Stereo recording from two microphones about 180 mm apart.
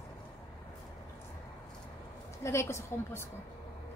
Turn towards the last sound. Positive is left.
turn(degrees=15)  # may be behind; listen again after turning